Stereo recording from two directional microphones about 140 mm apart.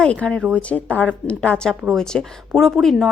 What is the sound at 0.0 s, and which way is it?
Speech, 5° left (ahead or behind).